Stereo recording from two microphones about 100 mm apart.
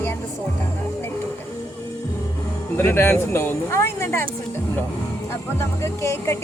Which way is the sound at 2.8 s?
20° left (ahead or behind).